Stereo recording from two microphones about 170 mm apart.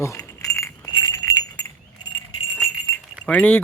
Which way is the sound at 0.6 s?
20° left (ahead or behind).